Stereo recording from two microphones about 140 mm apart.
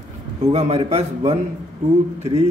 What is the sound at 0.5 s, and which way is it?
Speech, 45° right (ahead or behind).